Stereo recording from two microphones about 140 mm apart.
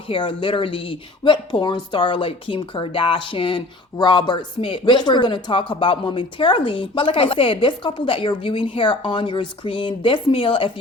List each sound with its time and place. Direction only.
0.1 s speech: 35° left (ahead or behind)